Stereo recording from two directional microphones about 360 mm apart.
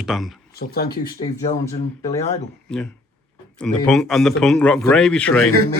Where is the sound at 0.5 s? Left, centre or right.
Left.